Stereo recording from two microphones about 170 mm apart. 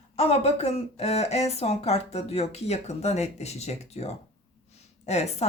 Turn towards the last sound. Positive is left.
turn(degrees=40)  # may be behind; listen again after turning